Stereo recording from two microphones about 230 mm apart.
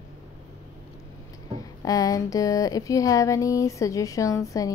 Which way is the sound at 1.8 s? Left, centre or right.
Centre.